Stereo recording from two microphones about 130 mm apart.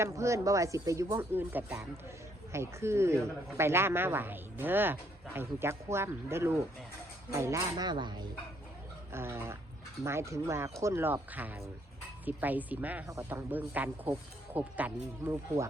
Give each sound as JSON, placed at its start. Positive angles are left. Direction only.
{"t": 0.0, "sound": "speech", "side_deg": -25}
{"t": 9.1, "sound": "speech", "side_deg": -20}